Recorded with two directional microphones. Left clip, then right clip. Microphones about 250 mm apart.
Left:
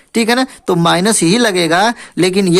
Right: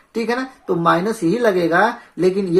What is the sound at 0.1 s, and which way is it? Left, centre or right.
Speech, left.